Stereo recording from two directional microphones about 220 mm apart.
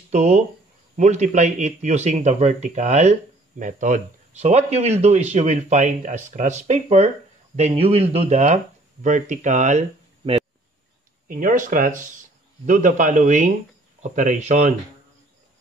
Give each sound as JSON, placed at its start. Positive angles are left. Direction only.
{"t": 0.1, "sound": "speech", "side_deg": -30}